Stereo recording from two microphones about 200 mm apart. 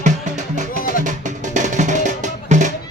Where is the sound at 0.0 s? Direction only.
35° right (ahead or behind).